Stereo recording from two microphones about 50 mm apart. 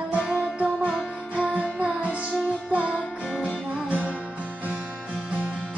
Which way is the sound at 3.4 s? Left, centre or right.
Right.